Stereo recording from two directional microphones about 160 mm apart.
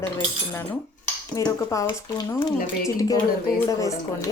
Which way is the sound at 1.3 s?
20° left (ahead or behind).